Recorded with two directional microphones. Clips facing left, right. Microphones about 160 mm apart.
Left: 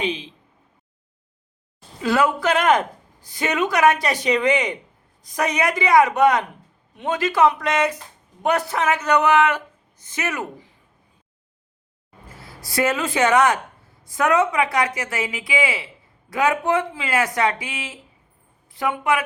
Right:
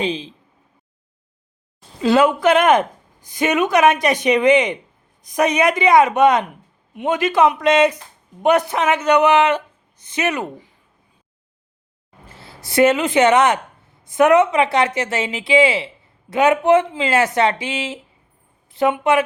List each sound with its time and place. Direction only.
0.0 s speech: 35° right (ahead or behind)
2.0 s speech: 25° right (ahead or behind)
12.3 s speech: 25° right (ahead or behind)